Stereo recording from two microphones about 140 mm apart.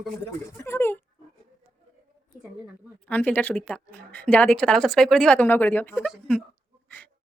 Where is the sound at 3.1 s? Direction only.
10° left (ahead or behind).